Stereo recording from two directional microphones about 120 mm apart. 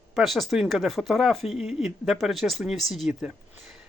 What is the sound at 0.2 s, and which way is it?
Speech, centre (ahead or behind).